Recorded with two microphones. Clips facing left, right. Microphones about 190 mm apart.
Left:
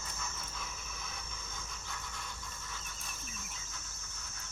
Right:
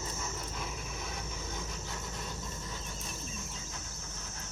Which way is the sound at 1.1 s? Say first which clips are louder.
Right 8 dB; 75° right (ahead or behind).